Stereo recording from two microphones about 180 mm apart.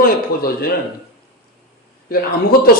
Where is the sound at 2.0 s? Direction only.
55° left (ahead or behind).